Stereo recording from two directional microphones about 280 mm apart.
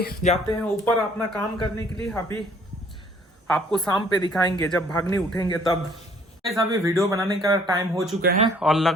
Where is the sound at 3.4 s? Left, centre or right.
Centre.